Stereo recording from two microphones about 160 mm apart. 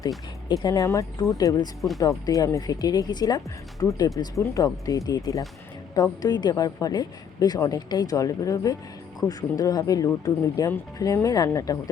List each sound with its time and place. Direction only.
0.4 s a woman's voice: 25° left (ahead or behind)